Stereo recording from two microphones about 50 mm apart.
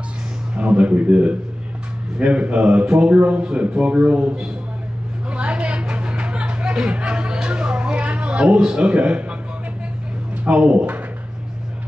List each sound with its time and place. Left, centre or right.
0.6 s a man's voice: right
5.3 s music: right
10.3 s speech: right